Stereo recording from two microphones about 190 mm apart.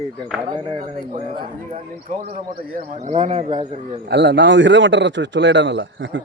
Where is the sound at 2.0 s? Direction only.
40° right (ahead or behind).